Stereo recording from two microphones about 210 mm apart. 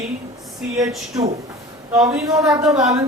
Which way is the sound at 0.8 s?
15° right (ahead or behind).